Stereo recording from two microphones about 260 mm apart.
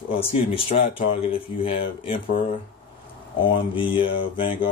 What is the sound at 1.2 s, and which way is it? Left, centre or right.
Speech, left.